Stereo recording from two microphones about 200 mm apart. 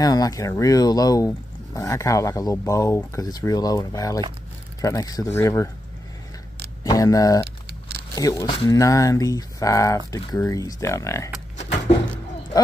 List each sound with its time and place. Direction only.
0.0 s speech: 20° left (ahead or behind)
6.8 s speech: 15° left (ahead or behind)